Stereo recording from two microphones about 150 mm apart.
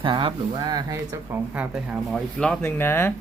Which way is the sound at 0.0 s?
35° right (ahead or behind).